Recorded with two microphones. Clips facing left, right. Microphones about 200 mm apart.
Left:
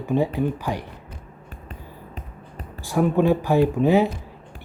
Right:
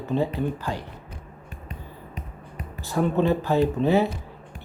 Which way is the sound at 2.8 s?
10° left (ahead or behind).